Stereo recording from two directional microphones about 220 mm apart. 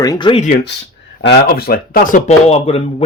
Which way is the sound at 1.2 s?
45° left (ahead or behind).